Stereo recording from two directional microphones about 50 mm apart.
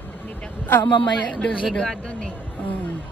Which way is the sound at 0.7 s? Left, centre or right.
Left.